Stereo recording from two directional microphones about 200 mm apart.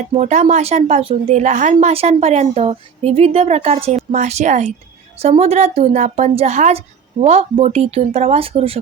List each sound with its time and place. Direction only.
0.1 s speech: 35° right (ahead or behind)